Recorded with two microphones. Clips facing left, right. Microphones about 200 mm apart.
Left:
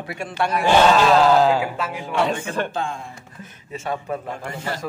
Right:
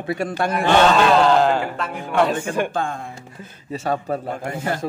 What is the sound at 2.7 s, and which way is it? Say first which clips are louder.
Speech: right 2 dB; 55° right (ahead or behind).